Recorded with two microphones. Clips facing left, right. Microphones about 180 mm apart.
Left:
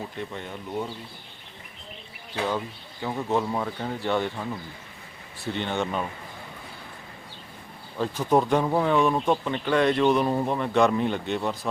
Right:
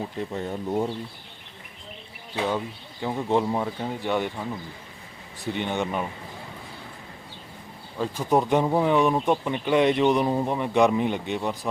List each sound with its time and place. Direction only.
0.2 s speech: 35° right (ahead or behind)
2.3 s speech: 15° right (ahead or behind)
3.6 s speech: 15° right (ahead or behind)
5.5 s speech: 15° right (ahead or behind)
7.9 s speech: 10° right (ahead or behind)